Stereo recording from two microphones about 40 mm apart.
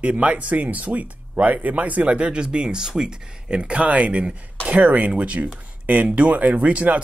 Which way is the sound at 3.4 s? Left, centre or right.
Right.